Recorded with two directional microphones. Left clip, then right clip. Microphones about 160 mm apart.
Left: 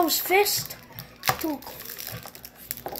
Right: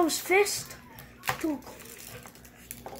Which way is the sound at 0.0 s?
15° right (ahead or behind).